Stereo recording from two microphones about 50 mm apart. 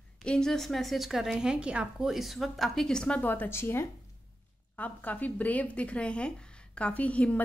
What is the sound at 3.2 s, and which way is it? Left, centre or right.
Speech, left.